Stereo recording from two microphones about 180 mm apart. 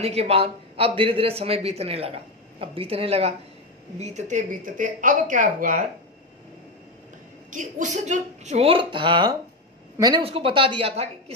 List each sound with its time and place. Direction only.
0.0 s a man's voice: 35° right (ahead or behind)
7.5 s a man's voice: 40° right (ahead or behind)